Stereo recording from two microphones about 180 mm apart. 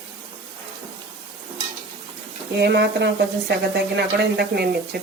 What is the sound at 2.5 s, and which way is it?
Speech, 70° right (ahead or behind).